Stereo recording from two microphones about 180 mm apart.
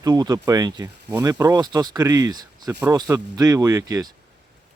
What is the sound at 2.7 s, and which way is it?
Speech, 10° right (ahead or behind).